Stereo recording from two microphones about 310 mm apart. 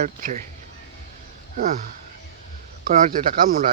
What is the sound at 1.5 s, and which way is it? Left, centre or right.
Speech, right.